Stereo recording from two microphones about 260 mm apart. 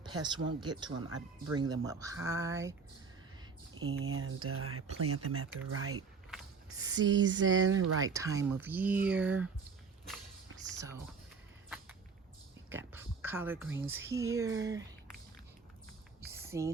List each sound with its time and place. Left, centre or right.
0.0 s speech: centre
3.8 s speech: right
7.4 s speech: centre
7.7 s speech: right
8.1 s speech: centre
10.8 s speech: centre
12.7 s a sound: centre
13.9 s speech: centre
16.3 s a sound: centre